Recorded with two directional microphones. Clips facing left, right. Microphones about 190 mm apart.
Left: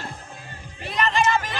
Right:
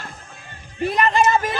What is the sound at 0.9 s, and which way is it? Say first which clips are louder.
Speech: right 3 dB; 45° right (ahead or behind).